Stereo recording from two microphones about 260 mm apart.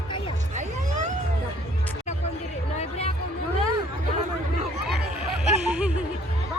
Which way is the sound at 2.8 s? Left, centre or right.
Left.